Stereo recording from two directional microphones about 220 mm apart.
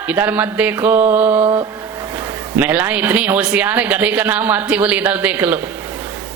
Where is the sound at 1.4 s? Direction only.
20° right (ahead or behind).